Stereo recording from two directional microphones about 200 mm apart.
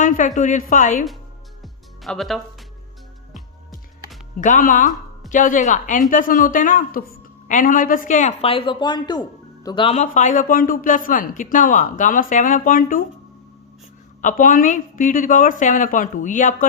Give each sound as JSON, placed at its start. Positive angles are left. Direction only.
{"t": 0.0, "sound": "a woman's voice", "side_deg": 40}
{"t": 1.6, "sound": "music", "side_deg": 0}
{"t": 4.4, "sound": "a woman's voice", "side_deg": 40}
{"t": 14.2, "sound": "a woman's voice", "side_deg": 40}